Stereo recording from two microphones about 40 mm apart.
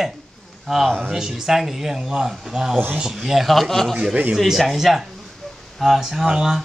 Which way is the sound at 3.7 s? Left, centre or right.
Centre.